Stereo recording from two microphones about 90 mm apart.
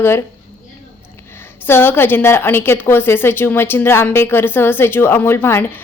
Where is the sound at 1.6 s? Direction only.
25° left (ahead or behind).